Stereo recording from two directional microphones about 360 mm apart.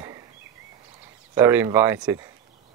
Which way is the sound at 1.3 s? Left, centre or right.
Centre.